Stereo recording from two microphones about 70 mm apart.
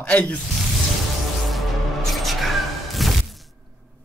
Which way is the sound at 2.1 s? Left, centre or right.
Centre.